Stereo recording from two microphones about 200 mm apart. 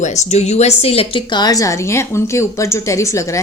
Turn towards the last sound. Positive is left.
turn(degrees=15)  # may be behind; listen again after turning